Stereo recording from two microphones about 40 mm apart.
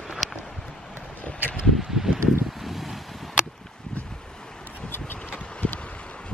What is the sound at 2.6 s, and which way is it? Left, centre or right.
Waves, centre.